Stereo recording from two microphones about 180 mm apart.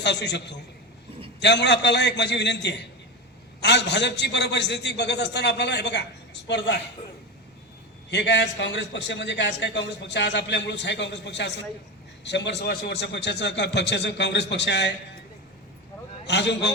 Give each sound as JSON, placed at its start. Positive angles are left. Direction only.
{"t": 0.0, "sound": "a man's voice", "side_deg": 70}
{"t": 8.1, "sound": "a man's voice", "side_deg": 75}
{"t": 16.2, "sound": "a man's voice", "side_deg": 75}